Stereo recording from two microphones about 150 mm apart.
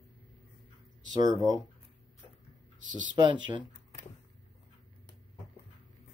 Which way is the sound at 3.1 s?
30° right (ahead or behind).